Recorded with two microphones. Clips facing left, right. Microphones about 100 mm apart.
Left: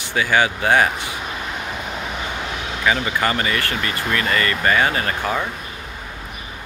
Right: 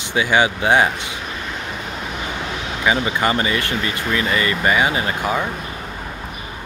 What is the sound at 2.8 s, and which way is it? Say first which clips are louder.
Speech: right 1 dB; 20° right (ahead or behind).